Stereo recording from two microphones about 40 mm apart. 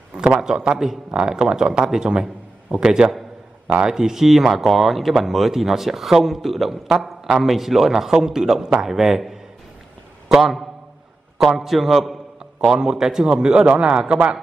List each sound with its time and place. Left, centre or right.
0.4 s a man's voice: centre
12.5 s a man's voice: right